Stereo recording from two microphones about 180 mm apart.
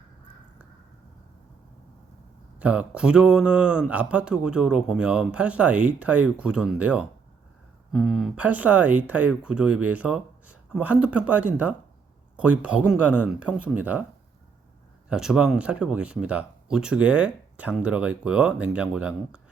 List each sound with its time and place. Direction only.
2.6 s speech: 10° right (ahead or behind)
15.1 s speech: 5° right (ahead or behind)